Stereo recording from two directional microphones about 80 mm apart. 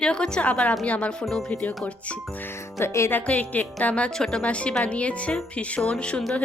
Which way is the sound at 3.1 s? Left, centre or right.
Centre.